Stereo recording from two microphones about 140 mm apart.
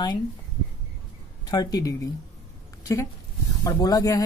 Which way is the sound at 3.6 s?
25° left (ahead or behind).